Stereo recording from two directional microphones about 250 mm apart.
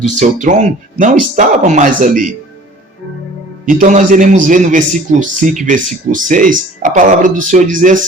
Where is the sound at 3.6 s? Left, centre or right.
Right.